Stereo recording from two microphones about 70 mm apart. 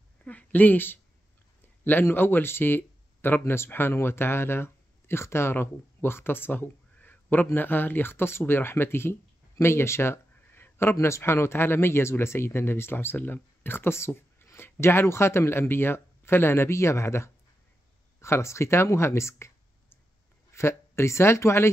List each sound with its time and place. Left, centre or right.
0.2 s speech: left
20.5 s speech: left